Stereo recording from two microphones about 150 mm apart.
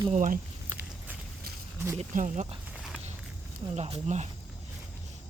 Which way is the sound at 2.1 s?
60° right (ahead or behind).